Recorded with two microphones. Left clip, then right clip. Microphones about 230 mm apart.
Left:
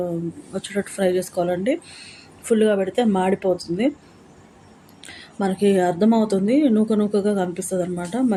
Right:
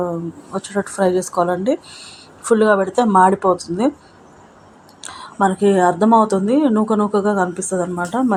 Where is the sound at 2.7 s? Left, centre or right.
Right.